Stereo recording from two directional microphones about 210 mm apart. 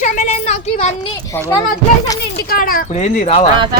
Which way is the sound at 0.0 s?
35° left (ahead or behind).